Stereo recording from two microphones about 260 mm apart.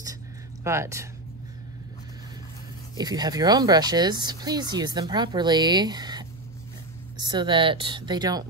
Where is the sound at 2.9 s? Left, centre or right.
Centre.